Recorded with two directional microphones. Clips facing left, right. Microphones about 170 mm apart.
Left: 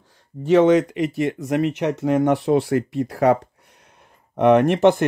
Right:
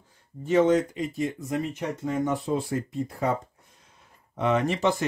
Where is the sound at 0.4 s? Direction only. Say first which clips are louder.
Left 6 dB; 75° left (ahead or behind).